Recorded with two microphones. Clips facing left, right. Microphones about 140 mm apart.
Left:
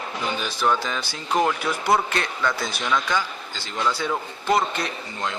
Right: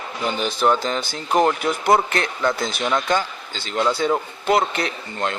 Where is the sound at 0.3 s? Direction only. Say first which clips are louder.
Right 4 dB; 50° right (ahead or behind).